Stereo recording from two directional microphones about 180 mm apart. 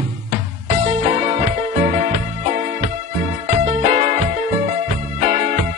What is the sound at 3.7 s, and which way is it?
Music, 35° right (ahead or behind).